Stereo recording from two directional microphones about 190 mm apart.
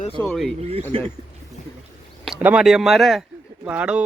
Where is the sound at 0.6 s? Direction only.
35° right (ahead or behind).